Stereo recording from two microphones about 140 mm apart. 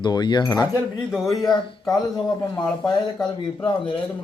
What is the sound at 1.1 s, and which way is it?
Speech, centre (ahead or behind).